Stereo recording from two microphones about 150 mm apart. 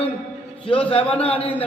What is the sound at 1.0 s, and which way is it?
Speech, 10° left (ahead or behind).